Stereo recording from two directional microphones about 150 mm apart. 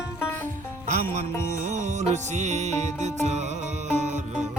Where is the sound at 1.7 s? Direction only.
50° right (ahead or behind).